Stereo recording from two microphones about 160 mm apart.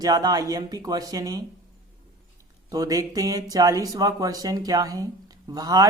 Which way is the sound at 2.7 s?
20° right (ahead or behind).